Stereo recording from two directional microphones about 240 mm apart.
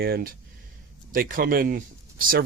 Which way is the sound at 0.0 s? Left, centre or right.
Right.